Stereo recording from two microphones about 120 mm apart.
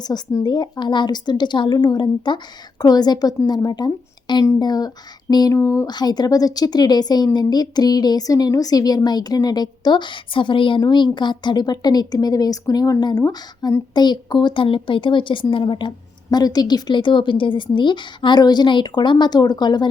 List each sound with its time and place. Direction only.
0.0 s speech: 35° left (ahead or behind)
5.9 s a woman's voice: 35° left (ahead or behind)